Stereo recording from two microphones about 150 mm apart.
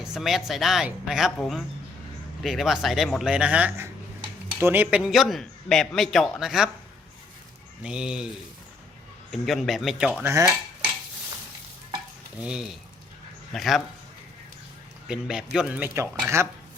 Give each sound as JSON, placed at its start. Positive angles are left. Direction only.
{"t": 0.0, "sound": "a man's voice", "side_deg": 0}
{"t": 7.8, "sound": "a man's voice", "side_deg": -5}
{"t": 9.3, "sound": "a man's voice", "side_deg": 0}
{"t": 10.2, "sound": "dishes", "side_deg": -20}
{"t": 12.4, "sound": "a man's voice", "side_deg": -5}
{"t": 15.0, "sound": "a man's voice", "side_deg": -5}